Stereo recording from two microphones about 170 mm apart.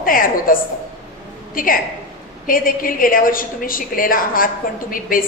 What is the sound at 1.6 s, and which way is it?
A woman's voice, 55° left (ahead or behind).